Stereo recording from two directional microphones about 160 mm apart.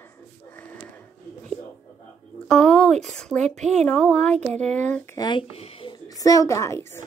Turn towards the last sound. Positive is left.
turn(degrees=20)  # may be behind; listen again after turning